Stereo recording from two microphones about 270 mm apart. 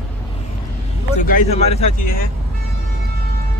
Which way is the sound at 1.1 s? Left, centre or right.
Left.